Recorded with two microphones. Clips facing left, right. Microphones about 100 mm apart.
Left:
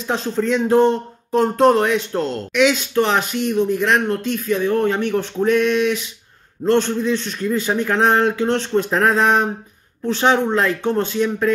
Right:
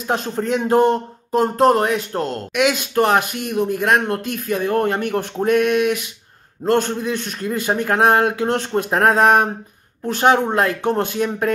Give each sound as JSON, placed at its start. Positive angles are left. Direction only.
{"t": 0.0, "sound": "speech", "side_deg": -50}
{"t": 1.4, "sound": "speech", "side_deg": -40}